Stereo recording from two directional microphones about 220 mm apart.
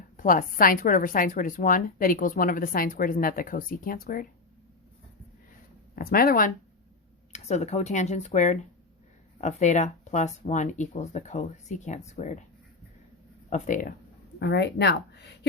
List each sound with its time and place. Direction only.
0.2 s a woman's voice: 40° left (ahead or behind)
6.0 s speech: 45° left (ahead or behind)
7.3 s a woman's voice: 30° left (ahead or behind)
13.5 s a woman's voice: 35° left (ahead or behind)
14.3 s speech: 50° left (ahead or behind)